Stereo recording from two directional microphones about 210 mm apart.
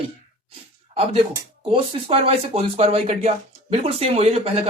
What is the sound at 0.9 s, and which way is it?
Speech, 25° right (ahead or behind).